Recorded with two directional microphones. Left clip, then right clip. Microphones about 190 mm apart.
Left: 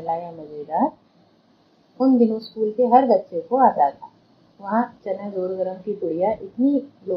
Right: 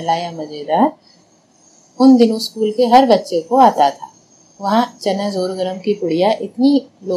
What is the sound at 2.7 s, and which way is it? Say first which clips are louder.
A woman's voice: right 5 dB; 40° right (ahead or behind).